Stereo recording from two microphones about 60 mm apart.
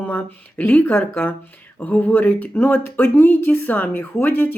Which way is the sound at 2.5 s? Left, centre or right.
Left.